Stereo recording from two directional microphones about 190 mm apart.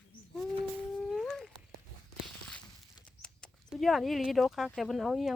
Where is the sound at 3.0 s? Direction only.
5° left (ahead or behind).